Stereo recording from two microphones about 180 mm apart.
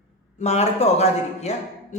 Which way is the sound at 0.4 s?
35° left (ahead or behind).